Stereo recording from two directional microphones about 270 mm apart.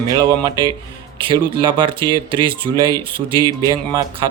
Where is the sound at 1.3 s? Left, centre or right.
Centre.